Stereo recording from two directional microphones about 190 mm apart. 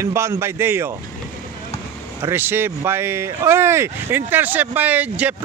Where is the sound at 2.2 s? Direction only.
10° right (ahead or behind).